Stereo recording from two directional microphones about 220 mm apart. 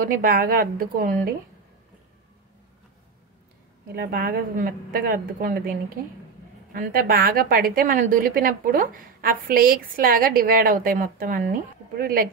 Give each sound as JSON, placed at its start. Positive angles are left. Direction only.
{"t": 0.0, "sound": "a woman's voice", "side_deg": -40}
{"t": 3.9, "sound": "a woman's voice", "side_deg": -45}
{"t": 6.7, "sound": "a woman's voice", "side_deg": -40}